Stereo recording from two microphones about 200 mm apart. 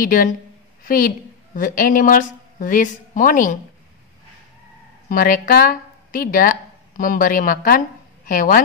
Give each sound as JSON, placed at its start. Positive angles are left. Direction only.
{"t": 0.0, "sound": "a woman's voice", "side_deg": 45}
{"t": 5.1, "sound": "a woman's voice", "side_deg": 45}